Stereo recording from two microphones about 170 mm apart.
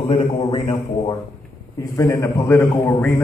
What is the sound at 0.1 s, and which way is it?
A man's voice, 35° left (ahead or behind).